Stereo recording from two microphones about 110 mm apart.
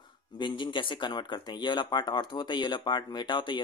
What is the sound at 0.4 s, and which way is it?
Speech, 45° left (ahead or behind).